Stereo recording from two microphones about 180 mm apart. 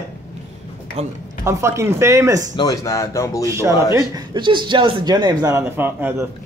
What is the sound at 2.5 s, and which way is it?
Speech, 20° left (ahead or behind).